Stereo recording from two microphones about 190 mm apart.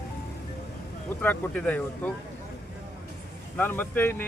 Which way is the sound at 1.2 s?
10° left (ahead or behind).